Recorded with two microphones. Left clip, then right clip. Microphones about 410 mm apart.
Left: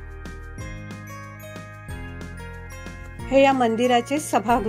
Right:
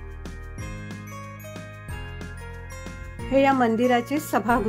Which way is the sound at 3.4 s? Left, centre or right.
Centre.